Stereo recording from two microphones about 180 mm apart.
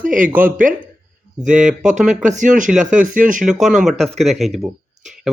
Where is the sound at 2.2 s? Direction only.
40° right (ahead or behind).